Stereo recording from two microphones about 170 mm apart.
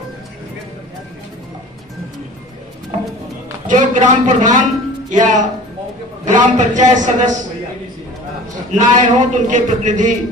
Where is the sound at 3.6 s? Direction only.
45° right (ahead or behind).